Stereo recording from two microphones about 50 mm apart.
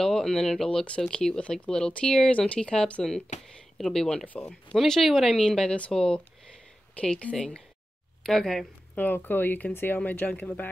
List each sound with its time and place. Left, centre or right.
0.0 s speech: centre
7.3 s speech: centre
8.9 s speech: left
10.3 s speech: left